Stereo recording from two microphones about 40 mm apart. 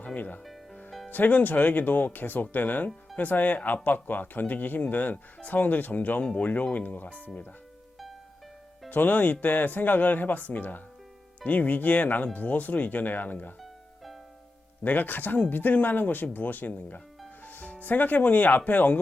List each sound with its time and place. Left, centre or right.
1.1 s speech: left
8.9 s speech: left
13.6 s music: centre
14.8 s speech: left
17.4 s music: left
17.8 s speech: left